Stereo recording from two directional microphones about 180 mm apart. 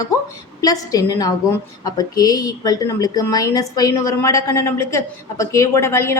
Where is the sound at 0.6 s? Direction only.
20° left (ahead or behind).